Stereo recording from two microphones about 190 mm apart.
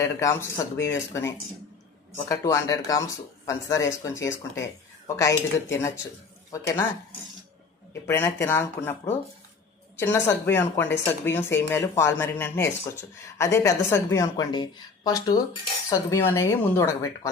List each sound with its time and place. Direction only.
0.0 s speech: 15° left (ahead or behind)
6.5 s speech: 15° left (ahead or behind)
8.0 s speech: 10° left (ahead or behind)
10.0 s speech: 10° left (ahead or behind)